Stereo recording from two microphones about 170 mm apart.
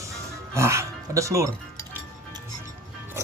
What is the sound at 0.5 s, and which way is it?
Speech, 15° right (ahead or behind).